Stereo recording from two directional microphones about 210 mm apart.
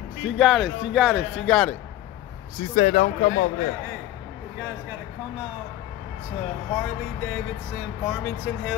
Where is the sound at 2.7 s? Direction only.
35° left (ahead or behind).